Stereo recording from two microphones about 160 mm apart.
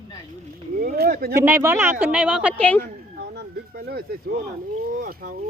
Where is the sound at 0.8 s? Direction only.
70° right (ahead or behind).